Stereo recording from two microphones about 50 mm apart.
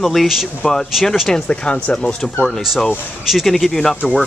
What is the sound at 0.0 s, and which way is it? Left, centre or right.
Speech, centre.